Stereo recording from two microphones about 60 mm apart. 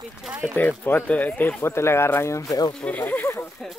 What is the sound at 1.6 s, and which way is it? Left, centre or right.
Speech, left.